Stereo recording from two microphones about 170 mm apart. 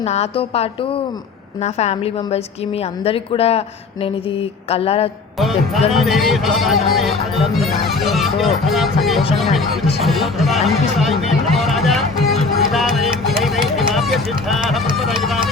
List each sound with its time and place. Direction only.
0.0 s a woman's voice: 35° left (ahead or behind)
5.4 s speech: centre (ahead or behind)
10.0 s a sound: centre (ahead or behind)
12.7 s music: centre (ahead or behind)
14.9 s run: centre (ahead or behind)